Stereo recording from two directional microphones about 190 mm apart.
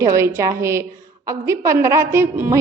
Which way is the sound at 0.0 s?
15° right (ahead or behind).